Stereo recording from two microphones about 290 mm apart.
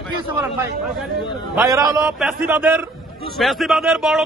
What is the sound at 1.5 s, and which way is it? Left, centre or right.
A man's voice, centre.